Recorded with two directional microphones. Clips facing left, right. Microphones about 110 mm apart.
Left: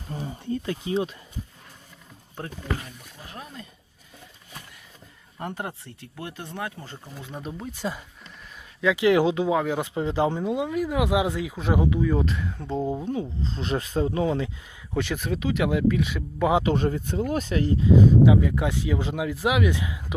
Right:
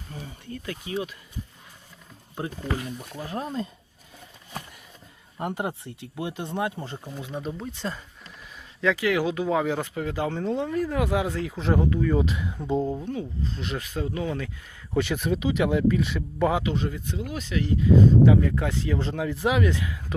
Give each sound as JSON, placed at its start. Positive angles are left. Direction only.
{"t": 0.1, "sound": "speech", "side_deg": 35}
{"t": 3.2, "sound": "speech", "side_deg": -35}
{"t": 5.4, "sound": "speech", "side_deg": -15}
{"t": 7.3, "sound": "speech", "side_deg": 0}
{"t": 9.0, "sound": "speech", "side_deg": 25}
{"t": 9.5, "sound": "speech", "side_deg": 0}
{"t": 9.8, "sound": "speech", "side_deg": 25}
{"t": 10.3, "sound": "speech", "side_deg": 10}
{"t": 12.8, "sound": "speech", "side_deg": 20}
{"t": 14.9, "sound": "speech", "side_deg": 0}
{"t": 16.6, "sound": "speech", "side_deg": 45}
{"t": 18.3, "sound": "speech", "side_deg": 10}
{"t": 19.7, "sound": "speech", "side_deg": 20}